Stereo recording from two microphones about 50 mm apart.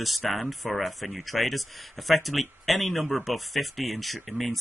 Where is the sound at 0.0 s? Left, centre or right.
Centre.